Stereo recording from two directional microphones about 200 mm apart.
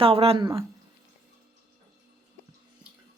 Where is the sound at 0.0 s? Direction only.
30° right (ahead or behind).